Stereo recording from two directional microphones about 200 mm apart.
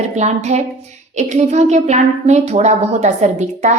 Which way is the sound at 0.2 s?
35° right (ahead or behind).